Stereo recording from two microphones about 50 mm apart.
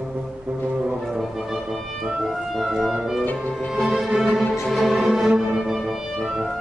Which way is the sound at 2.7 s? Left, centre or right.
Centre.